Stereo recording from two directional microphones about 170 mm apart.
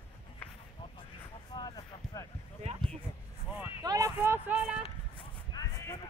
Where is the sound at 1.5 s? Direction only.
25° left (ahead or behind).